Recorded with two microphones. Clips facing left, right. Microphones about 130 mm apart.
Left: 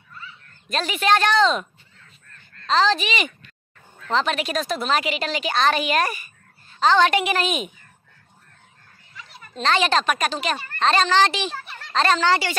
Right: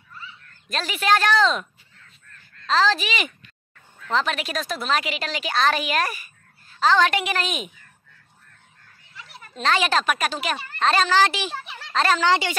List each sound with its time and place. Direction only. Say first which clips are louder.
0.7 s speech: left 1 dB; centre (ahead or behind)
9.5 s speech: left 1 dB; 5° right (ahead or behind)
11.5 s a sound: right 1 dB; 15° right (ahead or behind)
11.9 s speech: left 1 dB; 5° right (ahead or behind)
12.3 s a woman's voice: even; 15° right (ahead or behind)